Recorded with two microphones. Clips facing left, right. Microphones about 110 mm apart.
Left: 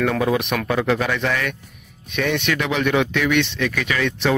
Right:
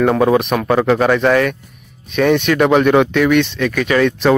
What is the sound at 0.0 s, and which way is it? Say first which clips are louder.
Speech: right 7 dB; 40° right (ahead or behind).